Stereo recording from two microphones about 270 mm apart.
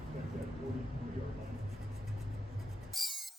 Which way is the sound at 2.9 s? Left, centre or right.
Centre.